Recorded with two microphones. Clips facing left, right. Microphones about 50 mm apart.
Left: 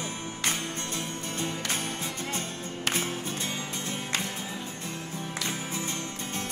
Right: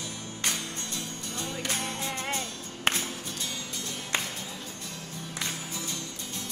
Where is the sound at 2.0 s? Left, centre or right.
Right.